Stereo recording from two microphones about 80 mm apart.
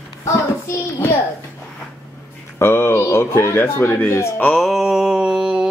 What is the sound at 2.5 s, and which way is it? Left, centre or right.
Speech, left.